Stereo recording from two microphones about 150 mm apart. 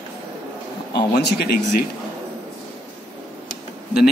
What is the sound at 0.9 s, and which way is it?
Speech, 90° left.